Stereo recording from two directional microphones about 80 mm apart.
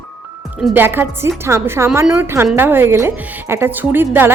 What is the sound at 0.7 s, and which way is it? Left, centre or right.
A woman's voice, right.